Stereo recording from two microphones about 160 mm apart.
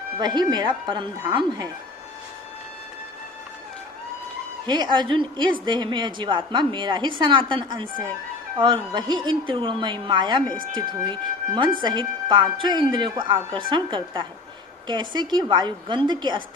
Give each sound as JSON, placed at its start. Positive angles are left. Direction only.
{"t": 0.2, "sound": "speech", "side_deg": -25}
{"t": 4.6, "sound": "a woman's voice", "side_deg": -30}